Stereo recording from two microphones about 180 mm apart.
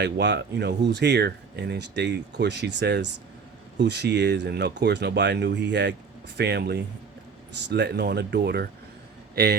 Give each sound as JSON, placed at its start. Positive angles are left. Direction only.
{"t": 0.0, "sound": "speech", "side_deg": -75}
{"t": 6.3, "sound": "a man's voice", "side_deg": -65}